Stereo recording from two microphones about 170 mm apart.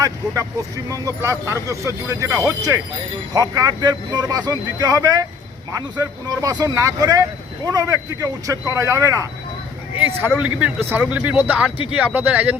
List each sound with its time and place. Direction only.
0.9 s speech: 20° right (ahead or behind)